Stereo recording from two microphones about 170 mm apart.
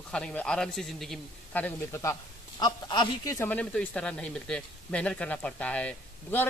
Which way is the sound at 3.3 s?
10° left (ahead or behind).